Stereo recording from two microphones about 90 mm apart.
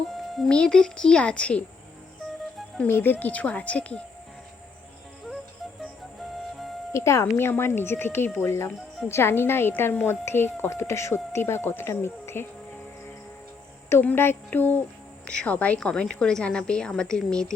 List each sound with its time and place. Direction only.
0.1 s music: centre (ahead or behind)
0.5 s a woman's voice: 10° left (ahead or behind)
2.8 s a woman's voice: 20° left (ahead or behind)
6.9 s speech: 30° left (ahead or behind)
14.0 s a woman's voice: 20° left (ahead or behind)